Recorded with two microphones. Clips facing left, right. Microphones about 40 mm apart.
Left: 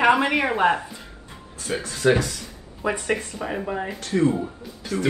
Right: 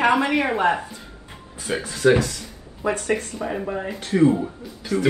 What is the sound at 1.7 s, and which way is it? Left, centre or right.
Speech, right.